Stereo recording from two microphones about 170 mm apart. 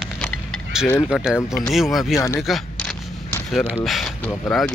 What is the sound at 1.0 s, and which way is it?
Speech, centre (ahead or behind).